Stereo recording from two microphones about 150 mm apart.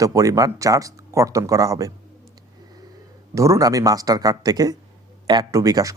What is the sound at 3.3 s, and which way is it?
Speech, 20° right (ahead or behind).